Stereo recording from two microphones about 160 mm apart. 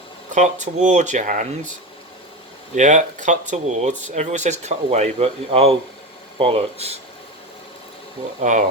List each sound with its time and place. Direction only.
0.3 s speech: 50° right (ahead or behind)
2.7 s speech: 50° right (ahead or behind)
8.4 s speech: 50° right (ahead or behind)